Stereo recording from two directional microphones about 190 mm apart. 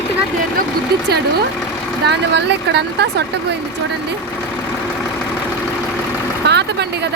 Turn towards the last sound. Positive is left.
turn(degrees=-65)  # may be behind; listen again after turning